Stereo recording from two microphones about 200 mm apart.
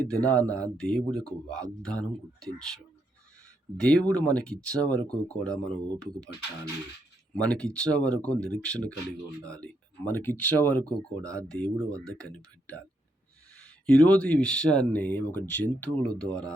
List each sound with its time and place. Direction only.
0.1 s speech: 5° left (ahead or behind)
3.8 s speech: 5° left (ahead or behind)
7.3 s speech: 5° left (ahead or behind)